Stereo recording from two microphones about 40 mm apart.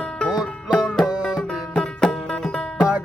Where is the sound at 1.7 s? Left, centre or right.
Left.